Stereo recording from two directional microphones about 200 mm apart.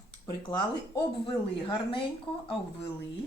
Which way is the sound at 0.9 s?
25° left (ahead or behind).